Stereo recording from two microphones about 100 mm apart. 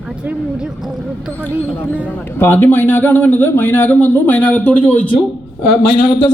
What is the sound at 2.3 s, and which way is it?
A man's voice, 20° left (ahead or behind).